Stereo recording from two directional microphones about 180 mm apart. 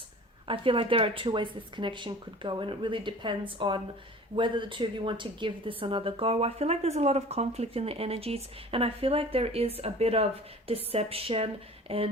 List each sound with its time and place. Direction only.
0.4 s a woman's voice: 30° right (ahead or behind)